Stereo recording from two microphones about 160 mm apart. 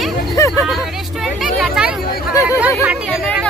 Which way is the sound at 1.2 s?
Centre (ahead or behind).